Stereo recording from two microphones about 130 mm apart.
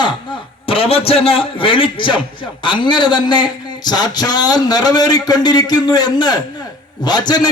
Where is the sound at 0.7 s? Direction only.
45° left (ahead or behind).